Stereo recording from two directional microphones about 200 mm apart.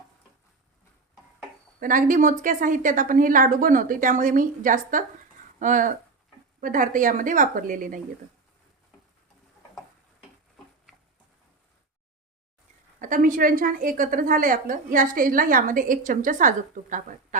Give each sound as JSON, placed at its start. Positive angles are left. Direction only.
{"t": 1.8, "sound": "a woman's voice", "side_deg": -40}
{"t": 13.0, "sound": "a woman's voice", "side_deg": -45}